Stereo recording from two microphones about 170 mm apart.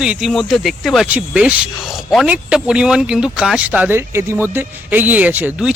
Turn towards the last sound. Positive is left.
turn(degrees=-10)  # may be behind; listen again after turning